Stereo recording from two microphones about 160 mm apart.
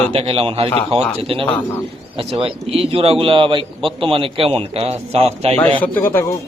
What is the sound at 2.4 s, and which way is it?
A man's voice, 35° right (ahead or behind).